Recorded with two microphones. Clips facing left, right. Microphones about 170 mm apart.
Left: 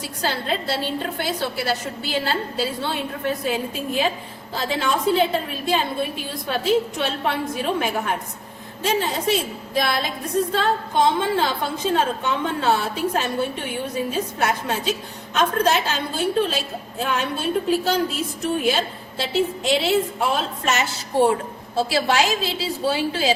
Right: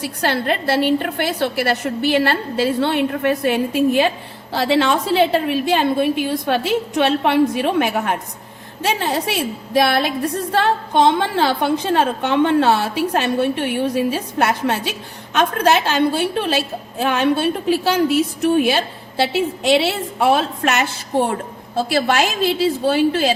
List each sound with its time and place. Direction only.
0.0 s a woman's voice: 65° right (ahead or behind)